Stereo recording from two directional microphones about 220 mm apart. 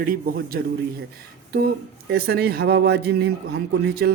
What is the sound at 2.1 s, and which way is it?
A man's voice, 45° right (ahead or behind).